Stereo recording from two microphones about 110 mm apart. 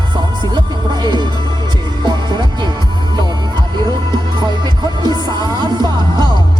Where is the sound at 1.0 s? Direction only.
45° right (ahead or behind).